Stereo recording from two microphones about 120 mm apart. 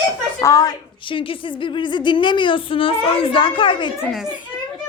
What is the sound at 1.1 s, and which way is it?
Speech, 45° left (ahead or behind).